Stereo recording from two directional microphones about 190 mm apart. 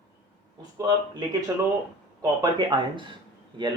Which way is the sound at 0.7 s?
20° right (ahead or behind).